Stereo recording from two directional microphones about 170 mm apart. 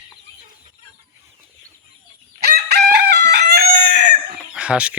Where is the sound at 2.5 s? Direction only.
65° right (ahead or behind).